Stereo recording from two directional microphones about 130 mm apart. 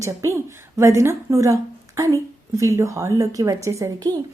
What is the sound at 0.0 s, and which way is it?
A woman's voice, 20° right (ahead or behind).